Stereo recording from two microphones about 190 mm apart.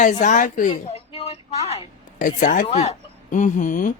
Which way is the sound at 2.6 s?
35° left (ahead or behind).